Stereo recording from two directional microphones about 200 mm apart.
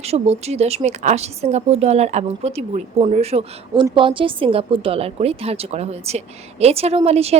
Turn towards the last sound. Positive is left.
turn(degrees=-30)  # may be behind; listen again after turning